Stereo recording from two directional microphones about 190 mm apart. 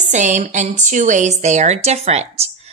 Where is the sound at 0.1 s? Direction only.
40° right (ahead or behind).